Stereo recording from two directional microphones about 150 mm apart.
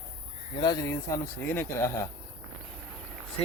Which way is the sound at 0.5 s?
30° left (ahead or behind).